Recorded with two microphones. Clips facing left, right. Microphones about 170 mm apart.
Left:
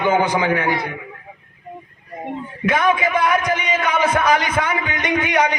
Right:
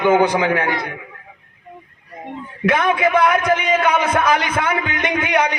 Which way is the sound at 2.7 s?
65° right (ahead or behind).